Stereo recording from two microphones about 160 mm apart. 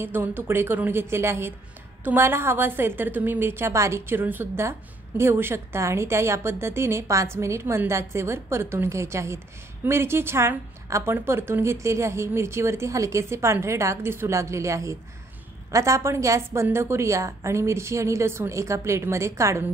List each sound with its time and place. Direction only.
0.0 s a woman's voice: 10° right (ahead or behind)